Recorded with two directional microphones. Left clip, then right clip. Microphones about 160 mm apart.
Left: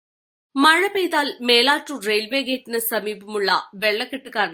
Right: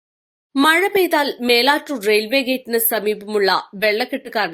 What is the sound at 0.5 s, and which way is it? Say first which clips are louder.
Speech: right 1 dB; 25° right (ahead or behind).